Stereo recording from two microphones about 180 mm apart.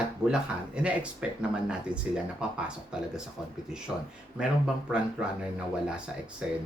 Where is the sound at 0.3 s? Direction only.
5° right (ahead or behind).